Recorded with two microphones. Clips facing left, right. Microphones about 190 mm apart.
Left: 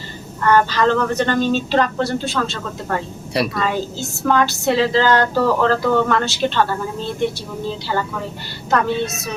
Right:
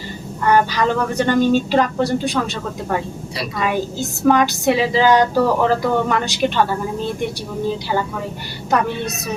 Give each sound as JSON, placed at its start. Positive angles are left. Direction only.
{"t": 0.4, "sound": "speech", "side_deg": -10}
{"t": 8.7, "sound": "speech", "side_deg": -15}